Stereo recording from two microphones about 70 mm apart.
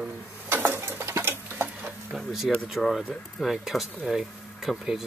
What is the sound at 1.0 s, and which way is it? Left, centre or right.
Tick-tock, right.